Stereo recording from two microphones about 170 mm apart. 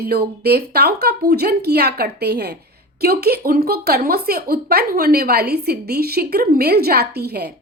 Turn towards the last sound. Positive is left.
turn(degrees=-70)  # may be behind; listen again after turning